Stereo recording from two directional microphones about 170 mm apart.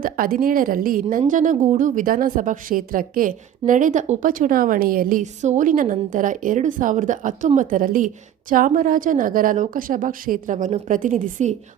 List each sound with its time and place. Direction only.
0.0 s speech: 55° right (ahead or behind)
1.0 s a woman's voice: 45° right (ahead or behind)